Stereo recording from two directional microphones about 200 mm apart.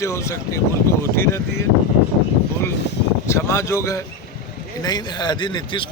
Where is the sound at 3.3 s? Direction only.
15° left (ahead or behind).